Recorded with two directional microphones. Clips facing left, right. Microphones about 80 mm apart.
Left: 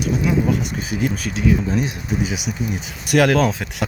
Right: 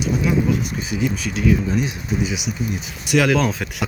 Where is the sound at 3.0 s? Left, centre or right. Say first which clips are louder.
Left 2 dB; left.